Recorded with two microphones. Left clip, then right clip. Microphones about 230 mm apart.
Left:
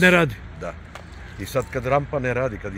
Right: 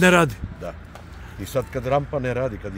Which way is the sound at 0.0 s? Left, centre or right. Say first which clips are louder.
Even; centre.